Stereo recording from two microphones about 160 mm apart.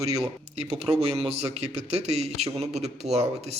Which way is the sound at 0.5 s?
40° right (ahead or behind).